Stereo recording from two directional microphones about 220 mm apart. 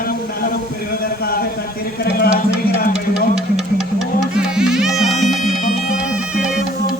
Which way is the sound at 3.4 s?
Centre (ahead or behind).